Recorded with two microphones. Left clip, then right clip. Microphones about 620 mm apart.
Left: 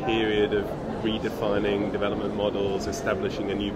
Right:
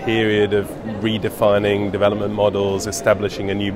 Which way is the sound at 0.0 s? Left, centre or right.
Right.